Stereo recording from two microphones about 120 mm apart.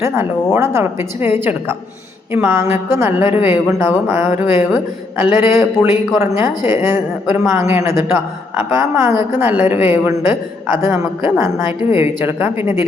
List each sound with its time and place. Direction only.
0.0 s a woman's voice: 20° right (ahead or behind)